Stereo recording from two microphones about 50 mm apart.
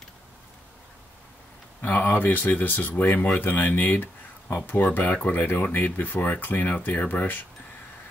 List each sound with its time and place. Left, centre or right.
1.8 s speech: left